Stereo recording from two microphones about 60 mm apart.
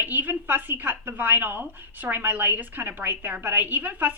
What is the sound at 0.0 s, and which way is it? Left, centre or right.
A woman's voice, right.